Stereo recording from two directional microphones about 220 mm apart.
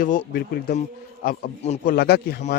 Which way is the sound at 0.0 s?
35° left (ahead or behind).